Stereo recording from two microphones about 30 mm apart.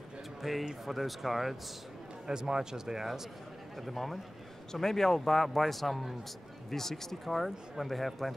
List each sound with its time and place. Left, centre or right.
0.4 s speech: centre
2.2 s speech: right
3.8 s speech: centre
4.7 s a man's voice: centre
6.7 s a man's voice: centre